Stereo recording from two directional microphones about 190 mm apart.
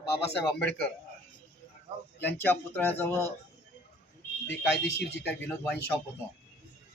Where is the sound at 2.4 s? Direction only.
10° left (ahead or behind).